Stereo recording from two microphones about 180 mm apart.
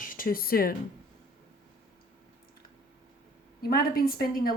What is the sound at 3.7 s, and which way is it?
Speech, 55° left (ahead or behind).